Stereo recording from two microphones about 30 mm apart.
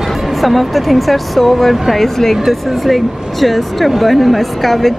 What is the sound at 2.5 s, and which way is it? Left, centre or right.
Speech, centre.